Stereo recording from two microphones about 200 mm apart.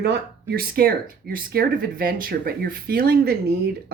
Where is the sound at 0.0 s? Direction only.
50° right (ahead or behind).